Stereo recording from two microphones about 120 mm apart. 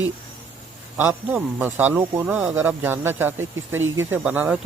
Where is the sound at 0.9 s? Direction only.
15° right (ahead or behind).